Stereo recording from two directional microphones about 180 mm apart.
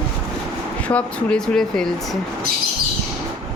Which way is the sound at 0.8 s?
5° left (ahead or behind).